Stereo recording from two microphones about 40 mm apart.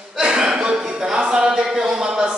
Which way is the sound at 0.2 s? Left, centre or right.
Centre.